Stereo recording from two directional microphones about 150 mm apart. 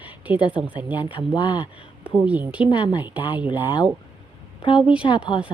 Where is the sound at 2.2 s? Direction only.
10° right (ahead or behind).